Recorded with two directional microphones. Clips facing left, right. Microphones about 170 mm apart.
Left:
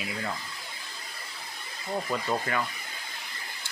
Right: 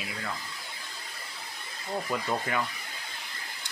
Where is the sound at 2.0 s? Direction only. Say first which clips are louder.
Left 1 dB; 5° left (ahead or behind).